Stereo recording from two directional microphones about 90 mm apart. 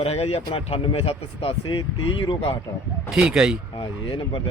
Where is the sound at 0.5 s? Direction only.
90° left.